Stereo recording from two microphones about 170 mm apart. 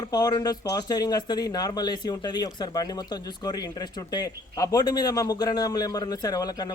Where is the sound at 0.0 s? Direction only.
25° left (ahead or behind).